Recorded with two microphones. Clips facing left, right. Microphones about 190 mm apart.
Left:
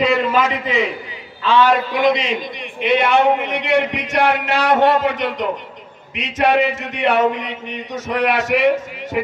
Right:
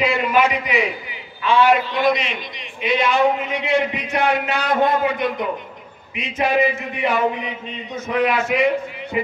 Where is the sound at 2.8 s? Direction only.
60° left (ahead or behind).